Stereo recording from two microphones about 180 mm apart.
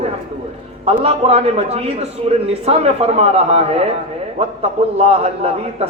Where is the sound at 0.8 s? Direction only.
35° right (ahead or behind).